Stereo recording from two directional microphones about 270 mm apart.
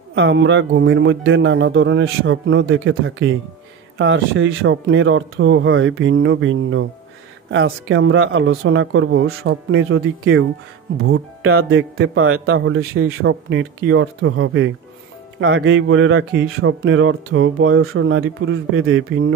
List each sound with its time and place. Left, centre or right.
0.1 s speech: right